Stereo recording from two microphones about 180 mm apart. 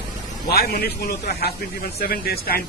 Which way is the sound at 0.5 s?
60° left (ahead or behind).